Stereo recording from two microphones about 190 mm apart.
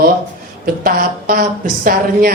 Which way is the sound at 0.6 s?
50° right (ahead or behind).